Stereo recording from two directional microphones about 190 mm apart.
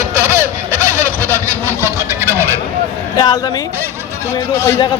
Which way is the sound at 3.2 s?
20° left (ahead or behind).